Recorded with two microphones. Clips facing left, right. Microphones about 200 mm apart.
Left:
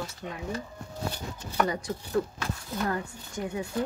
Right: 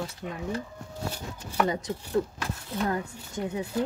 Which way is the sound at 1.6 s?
25° right (ahead or behind).